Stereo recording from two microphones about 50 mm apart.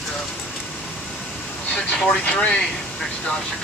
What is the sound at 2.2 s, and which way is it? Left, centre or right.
Speech, left.